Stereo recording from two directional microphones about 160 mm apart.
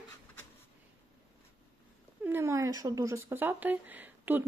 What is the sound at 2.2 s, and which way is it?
Speech, 15° right (ahead or behind).